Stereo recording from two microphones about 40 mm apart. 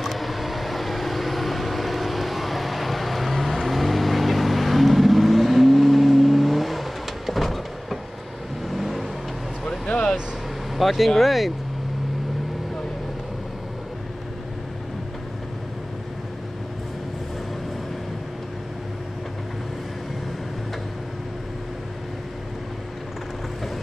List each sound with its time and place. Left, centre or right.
0.0 s vehicle: centre
9.8 s vehicle: left
10.8 s vehicle: centre
11.1 s speech: centre